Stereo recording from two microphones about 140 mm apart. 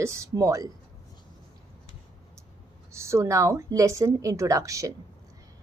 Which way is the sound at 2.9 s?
20° right (ahead or behind).